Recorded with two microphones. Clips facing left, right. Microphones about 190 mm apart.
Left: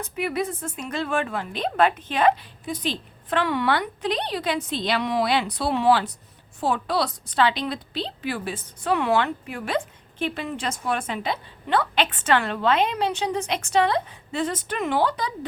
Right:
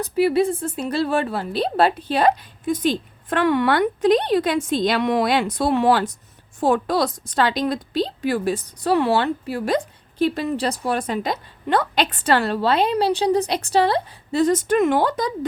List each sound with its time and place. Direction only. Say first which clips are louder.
0.0 s a woman's voice: right 9 dB; 35° right (ahead or behind)